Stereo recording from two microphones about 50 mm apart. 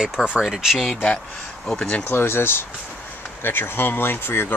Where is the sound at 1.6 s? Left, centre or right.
Centre.